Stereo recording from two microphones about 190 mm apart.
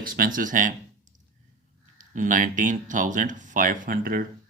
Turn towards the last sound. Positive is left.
turn(degrees=-45)  # may be behind; listen again after turning